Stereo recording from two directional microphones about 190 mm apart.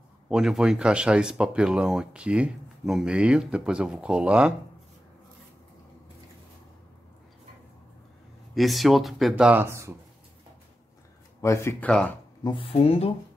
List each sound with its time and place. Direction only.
0.3 s speech: 5° right (ahead or behind)
8.5 s speech: centre (ahead or behind)
11.4 s speech: 15° left (ahead or behind)
12.4 s speech: 30° left (ahead or behind)